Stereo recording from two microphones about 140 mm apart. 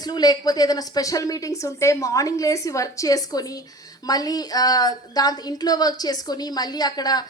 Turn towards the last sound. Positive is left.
turn(degrees=30)  # may be behind; listen again after turning